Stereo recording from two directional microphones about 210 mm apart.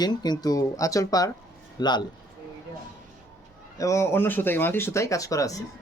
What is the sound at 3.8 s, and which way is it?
Speech, 15° left (ahead or behind).